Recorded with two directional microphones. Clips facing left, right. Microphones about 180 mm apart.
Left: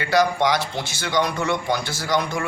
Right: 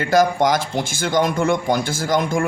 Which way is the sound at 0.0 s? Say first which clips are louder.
Right 3 dB; 45° right (ahead or behind).